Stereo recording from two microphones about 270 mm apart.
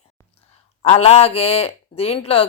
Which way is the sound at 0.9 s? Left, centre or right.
Left.